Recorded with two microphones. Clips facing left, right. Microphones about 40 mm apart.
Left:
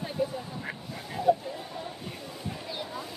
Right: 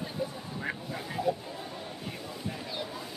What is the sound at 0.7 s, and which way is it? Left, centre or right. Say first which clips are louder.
Duck: right 2 dB; centre.